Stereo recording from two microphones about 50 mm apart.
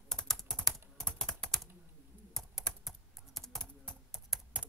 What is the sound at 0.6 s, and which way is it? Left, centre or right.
Typing, centre.